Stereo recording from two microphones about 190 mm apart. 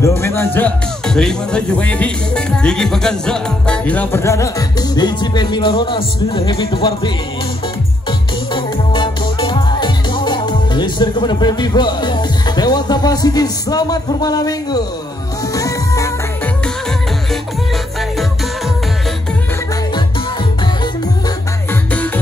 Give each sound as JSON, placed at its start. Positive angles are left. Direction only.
{"t": 0.2, "sound": "speech", "side_deg": 15}
{"t": 8.5, "sound": "music", "side_deg": 25}
{"t": 21.9, "sound": "music", "side_deg": 10}